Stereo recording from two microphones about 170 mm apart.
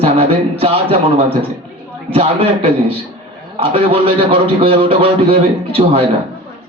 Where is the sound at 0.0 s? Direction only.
35° right (ahead or behind).